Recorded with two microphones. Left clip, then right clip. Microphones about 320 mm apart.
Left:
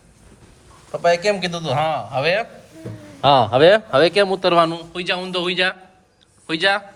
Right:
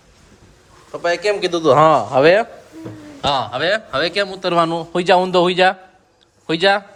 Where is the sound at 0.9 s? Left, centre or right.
Centre.